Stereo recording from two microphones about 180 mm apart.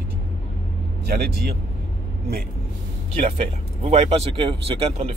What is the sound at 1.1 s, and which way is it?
Speech, 60° right (ahead or behind).